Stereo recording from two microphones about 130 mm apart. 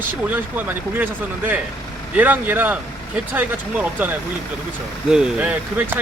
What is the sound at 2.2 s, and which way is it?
Speech, 15° right (ahead or behind).